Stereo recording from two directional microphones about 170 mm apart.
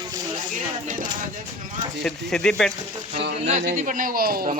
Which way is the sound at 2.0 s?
5° left (ahead or behind).